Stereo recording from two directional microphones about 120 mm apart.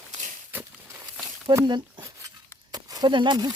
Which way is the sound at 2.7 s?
35° right (ahead or behind).